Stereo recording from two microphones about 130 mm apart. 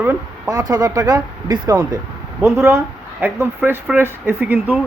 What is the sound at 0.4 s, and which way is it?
Speech, 30° right (ahead or behind).